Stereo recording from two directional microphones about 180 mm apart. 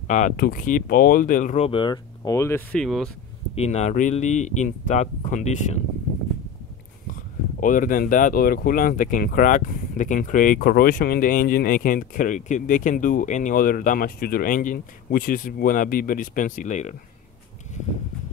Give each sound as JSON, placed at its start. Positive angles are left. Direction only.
{"t": 0.4, "sound": "speech", "side_deg": 50}
{"t": 2.8, "sound": "speech", "side_deg": 0}
{"t": 3.5, "sound": "speech", "side_deg": 40}
{"t": 7.6, "sound": "speech", "side_deg": 50}